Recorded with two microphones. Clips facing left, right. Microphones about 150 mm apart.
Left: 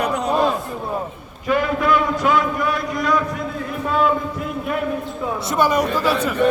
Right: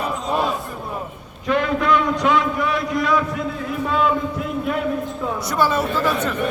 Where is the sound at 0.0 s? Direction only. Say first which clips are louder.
Left 4 dB; 70° left (ahead or behind).